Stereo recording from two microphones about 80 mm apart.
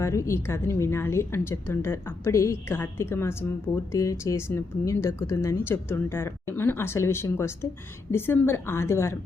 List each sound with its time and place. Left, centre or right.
0.0 s speech: left